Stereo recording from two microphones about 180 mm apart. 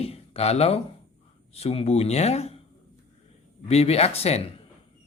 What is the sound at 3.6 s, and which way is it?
Speech, 35° left (ahead or behind).